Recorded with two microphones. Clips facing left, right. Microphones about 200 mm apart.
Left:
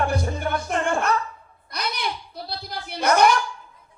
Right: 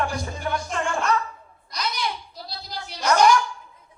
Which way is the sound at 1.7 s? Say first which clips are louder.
Even; 60° left (ahead or behind).